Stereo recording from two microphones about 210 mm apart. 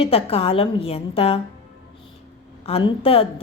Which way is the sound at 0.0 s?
25° left (ahead or behind).